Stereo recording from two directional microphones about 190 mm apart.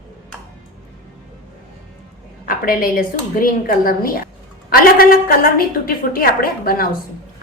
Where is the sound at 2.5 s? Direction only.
50° left (ahead or behind).